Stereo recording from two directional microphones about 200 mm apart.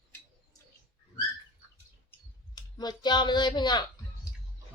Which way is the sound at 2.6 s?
20° left (ahead or behind).